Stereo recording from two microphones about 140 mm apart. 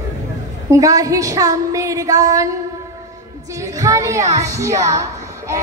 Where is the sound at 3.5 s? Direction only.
25° right (ahead or behind).